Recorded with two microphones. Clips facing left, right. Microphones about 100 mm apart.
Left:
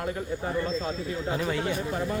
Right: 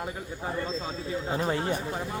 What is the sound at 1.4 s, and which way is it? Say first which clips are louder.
Speech: right 2 dB; 30° right (ahead or behind).